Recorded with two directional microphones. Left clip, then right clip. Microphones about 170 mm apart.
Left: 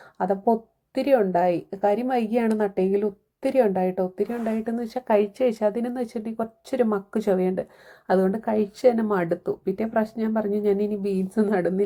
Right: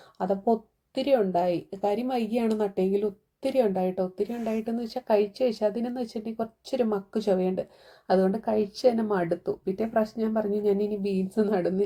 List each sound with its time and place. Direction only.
0.2 s a woman's voice: 10° left (ahead or behind)